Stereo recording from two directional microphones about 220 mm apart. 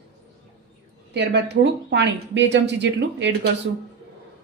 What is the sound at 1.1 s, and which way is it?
Speech, 50° right (ahead or behind).